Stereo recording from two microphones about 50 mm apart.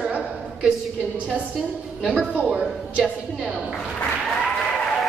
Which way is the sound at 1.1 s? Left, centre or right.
Right.